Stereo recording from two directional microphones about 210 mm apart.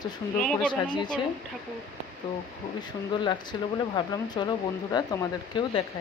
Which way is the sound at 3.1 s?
20° left (ahead or behind).